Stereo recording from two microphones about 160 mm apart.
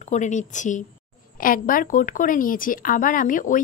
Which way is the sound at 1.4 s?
60° left (ahead or behind).